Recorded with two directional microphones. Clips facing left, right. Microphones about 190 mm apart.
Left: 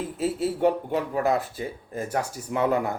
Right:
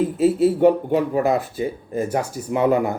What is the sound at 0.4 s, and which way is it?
Speech, 20° right (ahead or behind).